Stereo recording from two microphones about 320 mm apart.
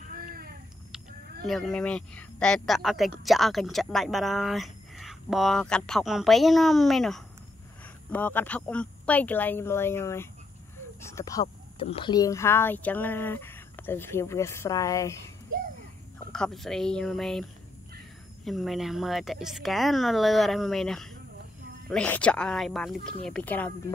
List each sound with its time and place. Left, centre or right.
0.1 s a sound: right
1.5 s speech: centre
16.3 s speech: centre